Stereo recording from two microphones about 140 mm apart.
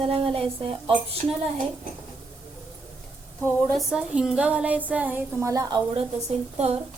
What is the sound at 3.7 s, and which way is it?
A woman's voice, centre (ahead or behind).